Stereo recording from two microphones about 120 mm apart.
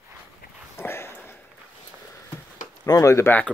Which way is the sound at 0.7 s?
20° left (ahead or behind).